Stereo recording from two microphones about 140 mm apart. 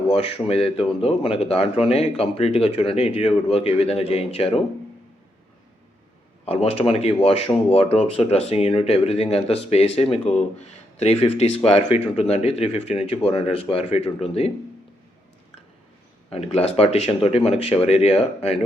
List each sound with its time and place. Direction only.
0.2 s speech: 45° left (ahead or behind)
6.4 s speech: 45° left (ahead or behind)
16.3 s speech: 45° left (ahead or behind)